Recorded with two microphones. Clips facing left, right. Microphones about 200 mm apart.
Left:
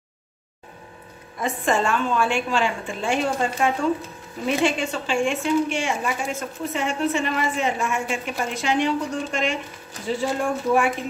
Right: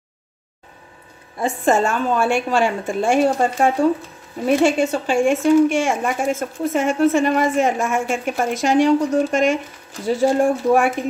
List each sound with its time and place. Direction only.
1.4 s a woman's voice: 40° right (ahead or behind)